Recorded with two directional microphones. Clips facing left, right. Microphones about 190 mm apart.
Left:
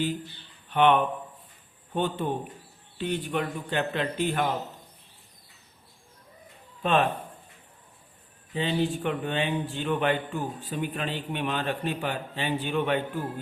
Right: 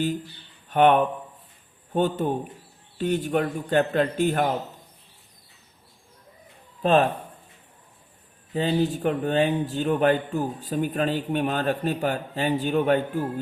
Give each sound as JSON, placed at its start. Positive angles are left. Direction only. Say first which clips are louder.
{"t": 0.7, "sound": "a man's voice", "louder": "right 3 dB", "side_deg": -45}
{"t": 6.8, "sound": "speech", "louder": "right 4 dB", "side_deg": -35}
{"t": 8.5, "sound": "speech", "louder": "right 4 dB", "side_deg": -40}